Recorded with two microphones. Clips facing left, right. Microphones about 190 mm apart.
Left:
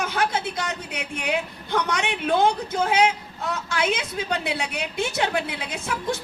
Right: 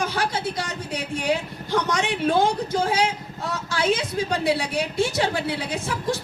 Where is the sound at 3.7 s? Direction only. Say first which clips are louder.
Right 3 dB; 35° right (ahead or behind).